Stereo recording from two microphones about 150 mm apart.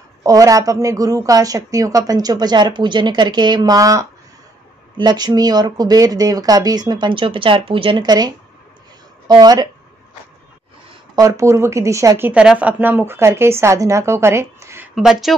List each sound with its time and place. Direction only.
0.2 s a woman's voice: 20° right (ahead or behind)
9.3 s a woman's voice: 25° right (ahead or behind)
11.1 s speech: 20° right (ahead or behind)
15.0 s speech: centre (ahead or behind)